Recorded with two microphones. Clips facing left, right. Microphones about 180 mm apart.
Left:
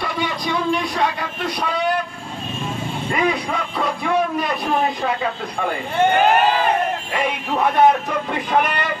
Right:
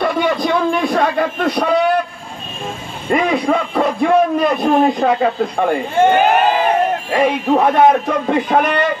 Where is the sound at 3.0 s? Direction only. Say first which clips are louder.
Right 7 dB; 50° right (ahead or behind).